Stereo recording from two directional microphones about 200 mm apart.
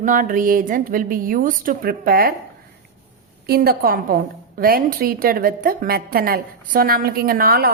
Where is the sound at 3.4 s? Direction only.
50° right (ahead or behind).